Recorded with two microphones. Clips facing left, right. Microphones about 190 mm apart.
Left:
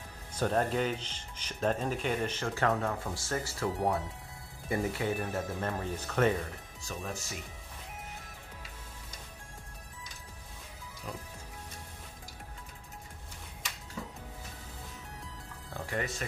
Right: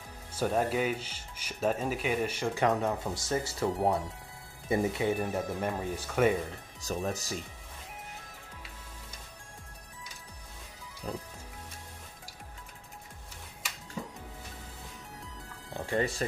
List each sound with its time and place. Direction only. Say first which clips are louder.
0.3 s speech: right 1 dB; 10° right (ahead or behind)
6.8 s speech: right 7 dB; 40° right (ahead or behind)
15.7 s music: right 5 dB; 30° right (ahead or behind)